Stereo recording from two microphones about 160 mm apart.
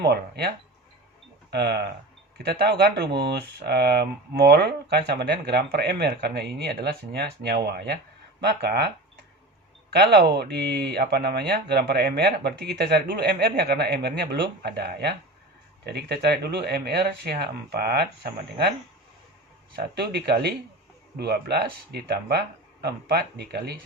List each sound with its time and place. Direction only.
0.0 s speech: 90° right
1.5 s speech: 90° right
9.9 s speech: 90° right
19.7 s speech: 85° right